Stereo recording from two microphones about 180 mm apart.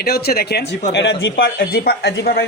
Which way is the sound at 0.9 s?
75° left (ahead or behind).